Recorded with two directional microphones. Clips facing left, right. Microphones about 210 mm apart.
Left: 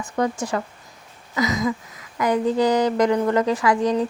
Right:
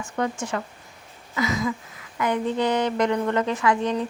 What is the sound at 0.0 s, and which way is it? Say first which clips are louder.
Speech: left 3 dB; 35° left (ahead or behind).